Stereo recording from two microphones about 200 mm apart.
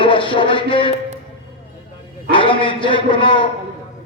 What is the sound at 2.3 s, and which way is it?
A man's voice, 25° left (ahead or behind).